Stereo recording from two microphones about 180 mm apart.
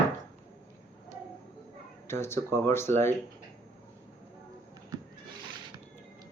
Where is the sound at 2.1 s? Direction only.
15° left (ahead or behind).